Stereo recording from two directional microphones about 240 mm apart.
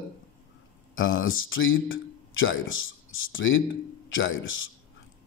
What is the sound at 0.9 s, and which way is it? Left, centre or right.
Speech, left.